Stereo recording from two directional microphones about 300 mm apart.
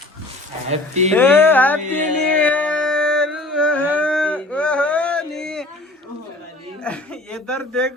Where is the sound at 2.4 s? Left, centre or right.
Centre.